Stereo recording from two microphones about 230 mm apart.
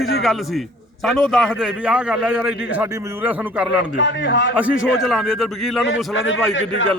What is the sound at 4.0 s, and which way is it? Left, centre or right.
Speech, left.